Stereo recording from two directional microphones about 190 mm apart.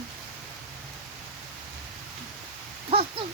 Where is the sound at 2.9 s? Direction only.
30° right (ahead or behind).